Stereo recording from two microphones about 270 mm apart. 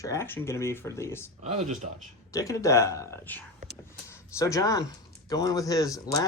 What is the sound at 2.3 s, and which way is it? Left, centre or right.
Speech, centre.